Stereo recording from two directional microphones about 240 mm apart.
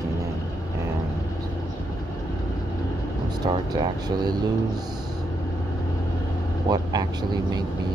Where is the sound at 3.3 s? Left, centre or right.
Centre.